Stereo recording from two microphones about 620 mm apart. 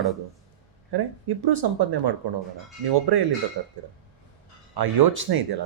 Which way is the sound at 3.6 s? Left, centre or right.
Right.